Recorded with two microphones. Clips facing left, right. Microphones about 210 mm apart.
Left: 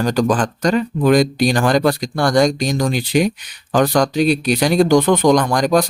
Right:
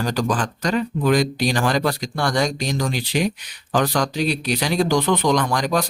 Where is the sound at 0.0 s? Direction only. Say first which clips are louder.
Left 6 dB; 50° left (ahead or behind).